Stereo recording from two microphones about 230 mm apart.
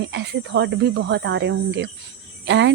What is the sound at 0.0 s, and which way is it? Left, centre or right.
Speech, right.